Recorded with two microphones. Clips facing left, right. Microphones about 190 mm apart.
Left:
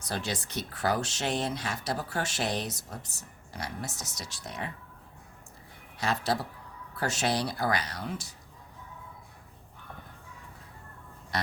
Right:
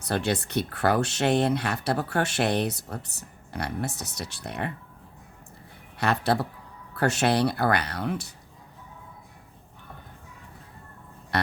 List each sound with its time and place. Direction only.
0.0 s speech: 60° right (ahead or behind)
6.0 s speech: 60° right (ahead or behind)
11.3 s speech: 60° right (ahead or behind)